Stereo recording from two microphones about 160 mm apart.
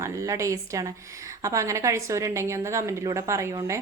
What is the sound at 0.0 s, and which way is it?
A woman's voice, 20° right (ahead or behind).